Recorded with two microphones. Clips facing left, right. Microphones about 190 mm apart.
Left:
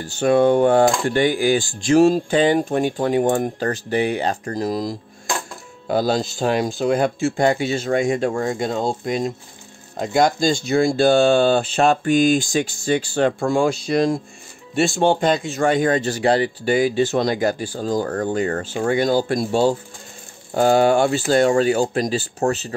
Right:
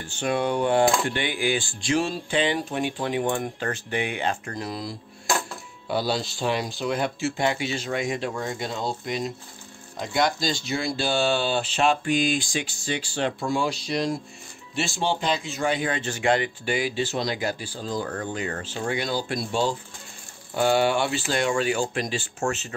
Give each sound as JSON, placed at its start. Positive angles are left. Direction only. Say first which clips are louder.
{"t": 0.0, "sound": "speech", "louder": "left 10 dB", "side_deg": 40}